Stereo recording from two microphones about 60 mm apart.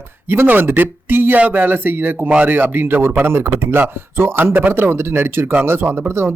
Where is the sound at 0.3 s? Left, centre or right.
Right.